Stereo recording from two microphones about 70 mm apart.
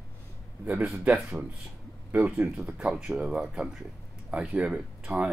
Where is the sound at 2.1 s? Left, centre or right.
Right.